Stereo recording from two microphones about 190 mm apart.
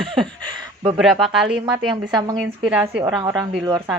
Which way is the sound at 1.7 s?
20° right (ahead or behind).